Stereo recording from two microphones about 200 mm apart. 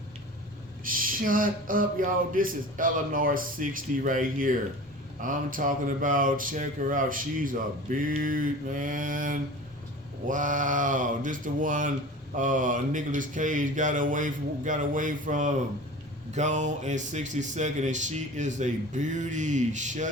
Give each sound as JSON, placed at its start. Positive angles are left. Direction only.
{"t": 0.9, "sound": "speech", "side_deg": -45}